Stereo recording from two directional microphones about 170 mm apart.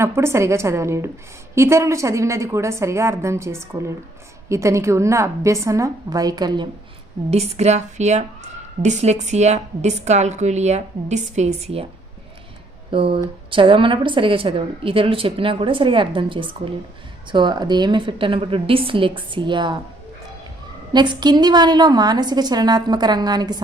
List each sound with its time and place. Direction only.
0.0 s a woman's voice: 15° right (ahead or behind)
7.3 s a woman's voice: 40° right (ahead or behind)
12.9 s a woman's voice: 30° right (ahead or behind)
20.9 s a woman's voice: 25° right (ahead or behind)